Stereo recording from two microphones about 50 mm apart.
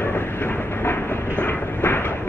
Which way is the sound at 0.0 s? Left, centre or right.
Left.